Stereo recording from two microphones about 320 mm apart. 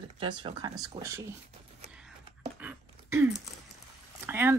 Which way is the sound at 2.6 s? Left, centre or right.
Centre.